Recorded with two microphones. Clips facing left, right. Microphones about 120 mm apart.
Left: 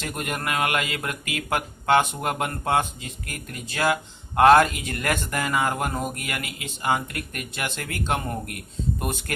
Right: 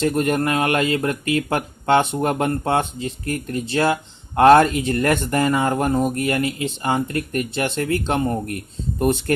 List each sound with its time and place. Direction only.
0.0 s speech: 35° right (ahead or behind)